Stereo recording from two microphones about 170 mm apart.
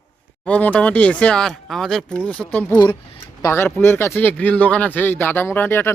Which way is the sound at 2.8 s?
30° left (ahead or behind).